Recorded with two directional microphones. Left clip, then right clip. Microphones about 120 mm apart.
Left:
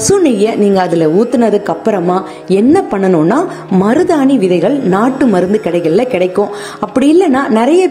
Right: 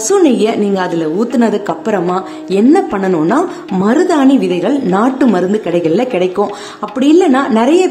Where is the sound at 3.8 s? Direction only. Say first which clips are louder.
Even; 50° left (ahead or behind).